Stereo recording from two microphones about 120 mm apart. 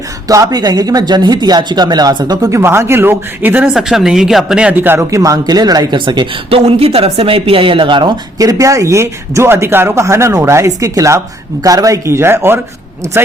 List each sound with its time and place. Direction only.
0.3 s speech: 30° right (ahead or behind)
3.8 s speech: 5° right (ahead or behind); by 6.2 s 35° right (ahead or behind)
6.5 s speech: 55° right (ahead or behind)
8.4 s speech: 30° right (ahead or behind)